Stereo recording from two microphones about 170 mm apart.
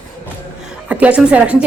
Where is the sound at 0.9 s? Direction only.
5° right (ahead or behind).